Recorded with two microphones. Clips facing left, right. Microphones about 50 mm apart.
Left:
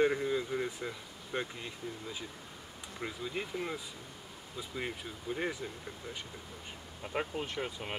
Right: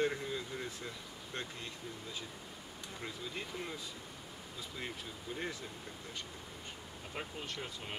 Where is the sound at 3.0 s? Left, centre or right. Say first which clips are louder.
Left 6 dB; centre.